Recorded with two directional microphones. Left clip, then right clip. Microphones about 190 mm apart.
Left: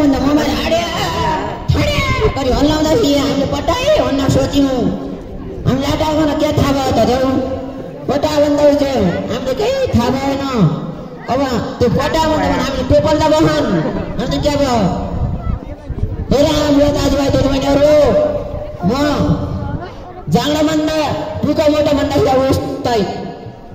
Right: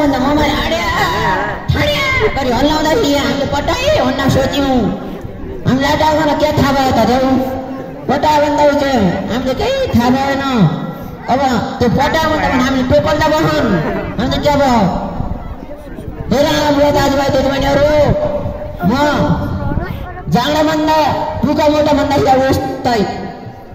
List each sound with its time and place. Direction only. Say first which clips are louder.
0.0 s music: right 1 dB; 25° left (ahead or behind)
4.2 s a man's voice: right 1 dB; 30° left (ahead or behind)
16.3 s a man's voice: even; 30° left (ahead or behind)